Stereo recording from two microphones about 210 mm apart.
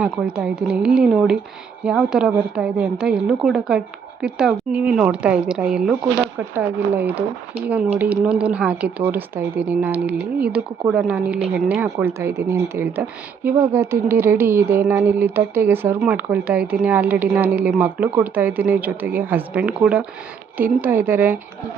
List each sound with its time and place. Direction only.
0.0 s a woman's voice: 5° right (ahead or behind)